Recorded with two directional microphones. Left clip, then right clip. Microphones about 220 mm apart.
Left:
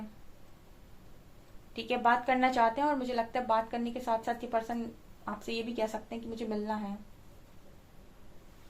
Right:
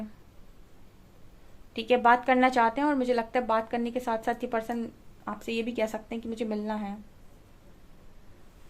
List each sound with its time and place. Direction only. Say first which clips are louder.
1.7 s speech: right 6 dB; 45° right (ahead or behind)